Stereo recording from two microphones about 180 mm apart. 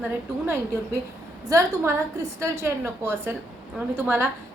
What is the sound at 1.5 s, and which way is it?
A woman's voice, 15° right (ahead or behind).